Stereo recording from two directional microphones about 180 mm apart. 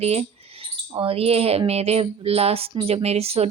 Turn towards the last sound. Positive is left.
turn(degrees=-35)  # may be behind; listen again after turning